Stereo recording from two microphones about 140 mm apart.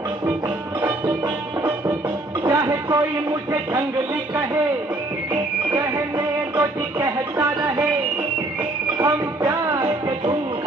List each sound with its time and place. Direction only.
2.4 s speech: 30° right (ahead or behind)
5.8 s music: 30° right (ahead or behind)
8.9 s music: 20° right (ahead or behind)